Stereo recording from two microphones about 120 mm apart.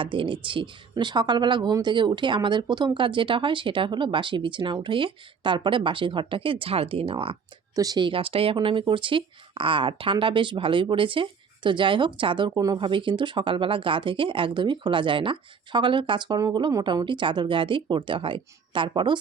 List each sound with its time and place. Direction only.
0.0 s speech: 45° right (ahead or behind)
7.8 s speech: 35° right (ahead or behind)